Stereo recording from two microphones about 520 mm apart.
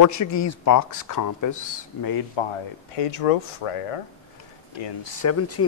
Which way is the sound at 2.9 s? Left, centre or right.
Left.